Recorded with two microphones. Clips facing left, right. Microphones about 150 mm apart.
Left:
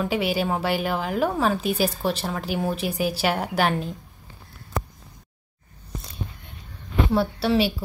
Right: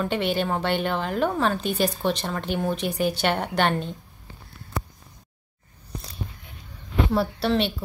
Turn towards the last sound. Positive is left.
turn(degrees=5)  # may be behind; listen again after turning